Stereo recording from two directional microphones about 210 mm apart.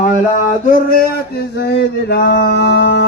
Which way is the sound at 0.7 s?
45° left (ahead or behind).